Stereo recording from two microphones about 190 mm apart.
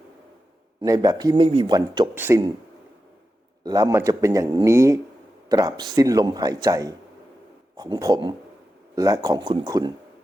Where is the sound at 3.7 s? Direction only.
20° right (ahead or behind).